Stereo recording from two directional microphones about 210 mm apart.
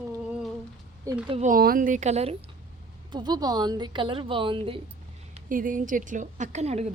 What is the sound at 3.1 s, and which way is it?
A woman's voice, 20° right (ahead or behind).